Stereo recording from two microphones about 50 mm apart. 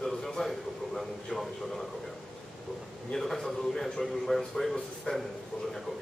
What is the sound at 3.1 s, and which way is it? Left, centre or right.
A man's voice, centre.